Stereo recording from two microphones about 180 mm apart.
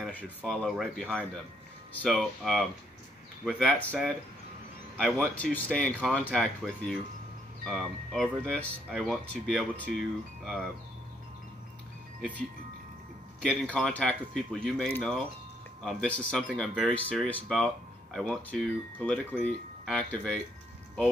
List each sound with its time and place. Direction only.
0.0 s speech: 10° left (ahead or behind)
12.2 s speech: 5° left (ahead or behind)